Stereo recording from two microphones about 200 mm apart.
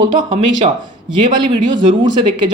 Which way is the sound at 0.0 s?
25° right (ahead or behind).